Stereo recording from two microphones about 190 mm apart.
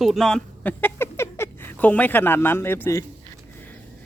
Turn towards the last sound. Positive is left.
turn(degrees=15)  # may be behind; listen again after turning